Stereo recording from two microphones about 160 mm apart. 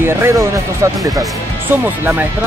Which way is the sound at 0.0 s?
15° right (ahead or behind).